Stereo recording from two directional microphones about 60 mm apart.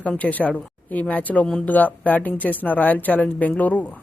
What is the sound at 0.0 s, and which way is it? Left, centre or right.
A woman's voice, left.